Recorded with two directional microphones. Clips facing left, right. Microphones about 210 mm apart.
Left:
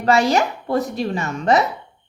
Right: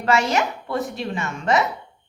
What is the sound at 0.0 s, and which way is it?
A woman's voice, 35° left (ahead or behind).